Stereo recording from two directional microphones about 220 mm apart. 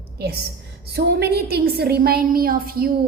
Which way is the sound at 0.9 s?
45° right (ahead or behind).